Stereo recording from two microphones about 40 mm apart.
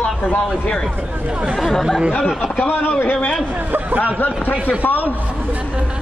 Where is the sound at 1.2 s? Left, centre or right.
Right.